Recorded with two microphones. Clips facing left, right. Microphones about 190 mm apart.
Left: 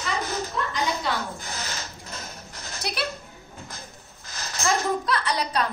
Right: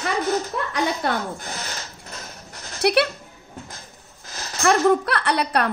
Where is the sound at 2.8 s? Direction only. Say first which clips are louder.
Right 12 dB; 65° right (ahead or behind).